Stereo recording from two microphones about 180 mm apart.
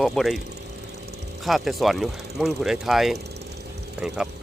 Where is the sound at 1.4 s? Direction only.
Centre (ahead or behind).